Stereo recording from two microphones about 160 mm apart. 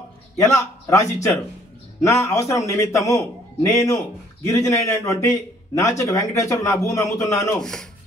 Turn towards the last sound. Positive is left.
turn(degrees=5)  # may be behind; listen again after turning